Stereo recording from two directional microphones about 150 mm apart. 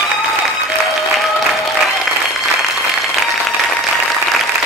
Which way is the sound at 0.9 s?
Centre (ahead or behind).